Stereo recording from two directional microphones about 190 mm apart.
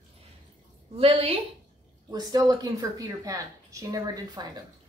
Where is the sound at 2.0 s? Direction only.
20° right (ahead or behind).